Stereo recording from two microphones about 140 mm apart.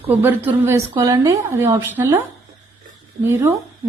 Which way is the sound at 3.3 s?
15° right (ahead or behind).